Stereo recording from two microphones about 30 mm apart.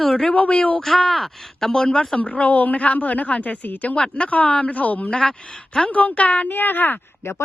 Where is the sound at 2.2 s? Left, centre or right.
Left.